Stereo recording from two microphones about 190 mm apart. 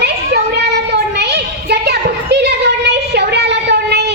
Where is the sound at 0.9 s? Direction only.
60° right (ahead or behind).